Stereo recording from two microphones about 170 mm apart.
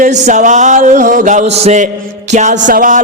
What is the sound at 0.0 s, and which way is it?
Music, 45° right (ahead or behind).